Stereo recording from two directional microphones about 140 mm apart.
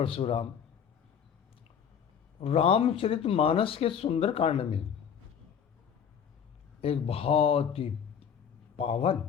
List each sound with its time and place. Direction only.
0.0 s a man's voice: 40° left (ahead or behind)
2.4 s speech: 45° left (ahead or behind)
6.8 s a man's voice: 45° left (ahead or behind)